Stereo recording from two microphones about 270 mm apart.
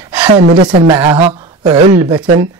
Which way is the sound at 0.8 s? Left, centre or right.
Centre.